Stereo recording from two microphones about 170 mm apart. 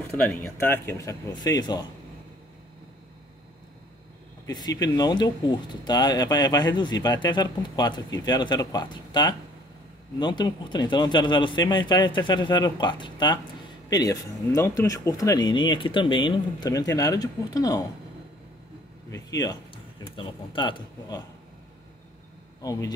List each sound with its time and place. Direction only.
0.0 s speech: 10° left (ahead or behind)
4.5 s speech: 25° left (ahead or behind)
19.0 s speech: 20° left (ahead or behind)
22.6 s speech: 20° left (ahead or behind)